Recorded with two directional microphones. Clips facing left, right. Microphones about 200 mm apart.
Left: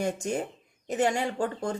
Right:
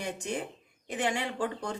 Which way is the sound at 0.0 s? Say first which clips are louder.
Left 5 dB; 45° left (ahead or behind).